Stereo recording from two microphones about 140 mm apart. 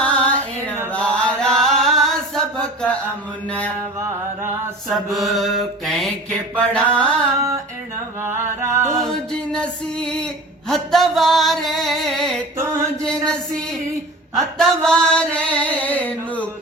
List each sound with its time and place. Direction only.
0.0 s music: 10° left (ahead or behind)
0.9 s chant: 10° left (ahead or behind)
4.9 s a sound: centre (ahead or behind)
6.6 s chant: 10° left (ahead or behind)
7.3 s female singing: 20° right (ahead or behind)
8.2 s music: 15° right (ahead or behind)
9.0 s music: 5° left (ahead or behind)
10.7 s a sound: centre (ahead or behind)
12.5 s mantra: 20° right (ahead or behind)
13.0 s chant: 5° left (ahead or behind)
14.3 s chant: centre (ahead or behind)